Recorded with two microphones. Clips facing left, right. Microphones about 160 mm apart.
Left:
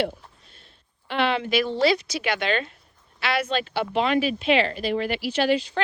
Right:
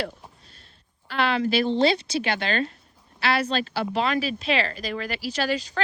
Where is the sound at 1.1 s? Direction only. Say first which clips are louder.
Even; 35° right (ahead or behind).